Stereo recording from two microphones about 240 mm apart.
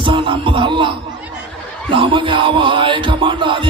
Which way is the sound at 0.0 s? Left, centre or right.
Right.